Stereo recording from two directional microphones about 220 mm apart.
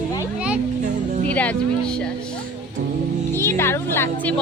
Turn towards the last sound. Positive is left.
turn(degrees=10)  # may be behind; listen again after turning